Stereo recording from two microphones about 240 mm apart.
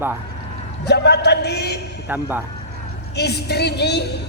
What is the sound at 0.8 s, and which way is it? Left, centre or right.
Speech, left.